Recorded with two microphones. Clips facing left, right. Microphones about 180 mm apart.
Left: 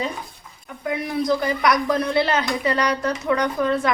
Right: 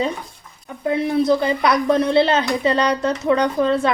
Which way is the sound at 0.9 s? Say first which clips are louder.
Right 5 dB; 25° right (ahead or behind).